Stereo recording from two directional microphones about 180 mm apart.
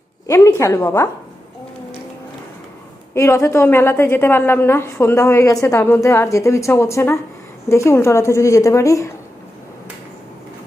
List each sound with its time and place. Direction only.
0.3 s a woman's voice: 15° left (ahead or behind)
3.2 s a woman's voice: 15° left (ahead or behind)